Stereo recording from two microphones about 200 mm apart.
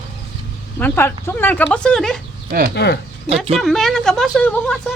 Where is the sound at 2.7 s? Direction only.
55° left (ahead or behind).